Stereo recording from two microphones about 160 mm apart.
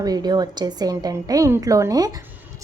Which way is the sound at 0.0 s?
25° right (ahead or behind).